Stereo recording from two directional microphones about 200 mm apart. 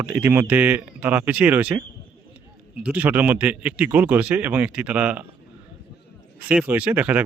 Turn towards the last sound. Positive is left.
turn(degrees=-5)  # may be behind; listen again after turning